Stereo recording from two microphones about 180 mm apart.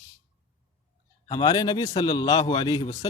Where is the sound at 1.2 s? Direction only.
20° left (ahead or behind).